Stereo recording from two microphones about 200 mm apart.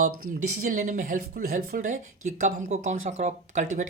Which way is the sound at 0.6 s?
40° right (ahead or behind).